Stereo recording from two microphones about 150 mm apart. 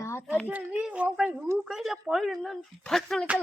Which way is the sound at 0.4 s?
10° right (ahead or behind).